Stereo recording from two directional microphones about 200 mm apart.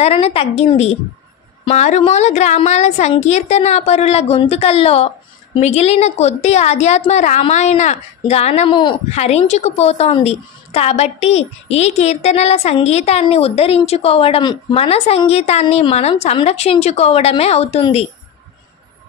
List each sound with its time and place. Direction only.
0.0 s a woman's voice: 30° left (ahead or behind)